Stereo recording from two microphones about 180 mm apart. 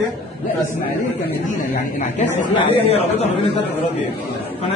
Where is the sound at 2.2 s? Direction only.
35° left (ahead or behind).